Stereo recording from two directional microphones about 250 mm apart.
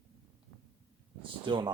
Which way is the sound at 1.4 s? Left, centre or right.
Centre.